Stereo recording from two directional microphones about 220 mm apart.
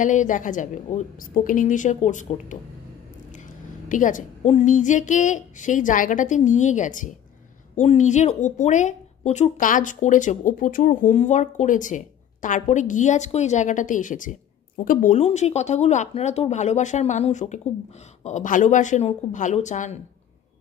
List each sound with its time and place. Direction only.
0.0 s a woman's voice: 35° left (ahead or behind)
3.9 s a woman's voice: 35° left (ahead or behind)